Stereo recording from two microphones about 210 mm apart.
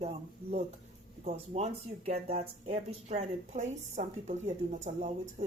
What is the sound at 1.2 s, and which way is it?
Speech, 35° right (ahead or behind).